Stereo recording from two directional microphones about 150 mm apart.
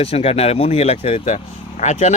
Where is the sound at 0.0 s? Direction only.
40° left (ahead or behind).